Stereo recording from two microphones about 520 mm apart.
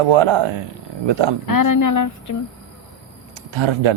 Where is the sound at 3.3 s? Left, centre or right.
Right.